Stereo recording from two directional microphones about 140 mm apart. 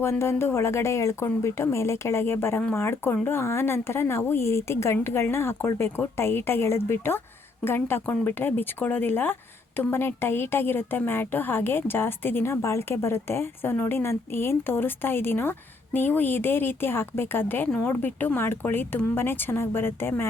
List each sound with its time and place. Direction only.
0.0 s speech: 20° left (ahead or behind)